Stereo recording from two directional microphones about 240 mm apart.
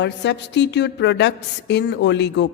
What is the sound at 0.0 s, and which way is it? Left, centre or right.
A woman's voice, left.